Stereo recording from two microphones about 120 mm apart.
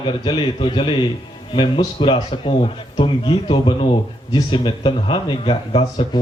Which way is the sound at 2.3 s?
50° left (ahead or behind).